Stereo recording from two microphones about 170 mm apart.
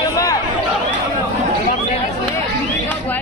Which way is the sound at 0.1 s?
20° left (ahead or behind).